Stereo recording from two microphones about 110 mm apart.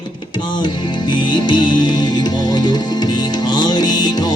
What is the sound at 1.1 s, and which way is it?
Music, 45° left (ahead or behind).